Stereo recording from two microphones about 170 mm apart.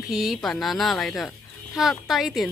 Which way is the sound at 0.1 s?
Centre (ahead or behind).